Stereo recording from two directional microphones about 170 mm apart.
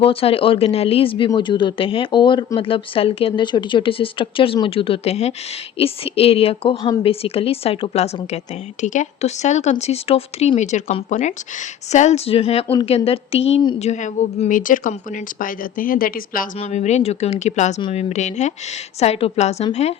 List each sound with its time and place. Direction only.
0.0 s a woman's voice: 35° left (ahead or behind); by 16.5 s 55° left (ahead or behind)
16.6 s a woman's voice: 40° left (ahead or behind)